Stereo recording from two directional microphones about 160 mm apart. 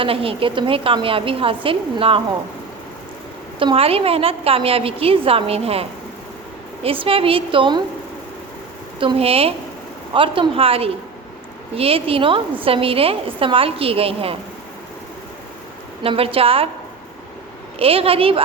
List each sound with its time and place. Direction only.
0.0 s a woman's voice: 35° right (ahead or behind)
3.6 s a woman's voice: 35° right (ahead or behind)
9.0 s a woman's voice: 35° right (ahead or behind)
16.0 s a woman's voice: 35° right (ahead or behind)
17.7 s a woman's voice: 35° right (ahead or behind)